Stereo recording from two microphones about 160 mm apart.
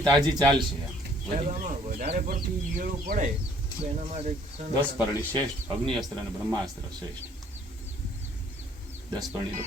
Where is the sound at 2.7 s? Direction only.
60° right (ahead or behind).